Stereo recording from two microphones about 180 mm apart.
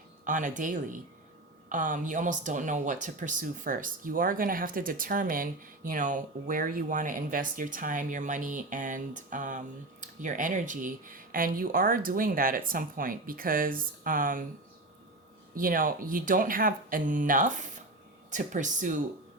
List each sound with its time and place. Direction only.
0.3 s speech: 45° right (ahead or behind)
15.5 s speech: 50° right (ahead or behind)